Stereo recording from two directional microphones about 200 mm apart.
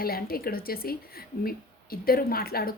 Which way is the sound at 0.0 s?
50° left (ahead or behind).